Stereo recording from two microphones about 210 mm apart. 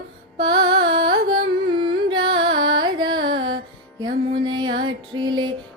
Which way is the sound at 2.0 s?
25° right (ahead or behind).